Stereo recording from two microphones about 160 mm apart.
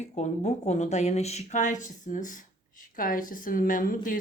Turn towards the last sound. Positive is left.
turn(degrees=60)  # may be behind; listen again after turning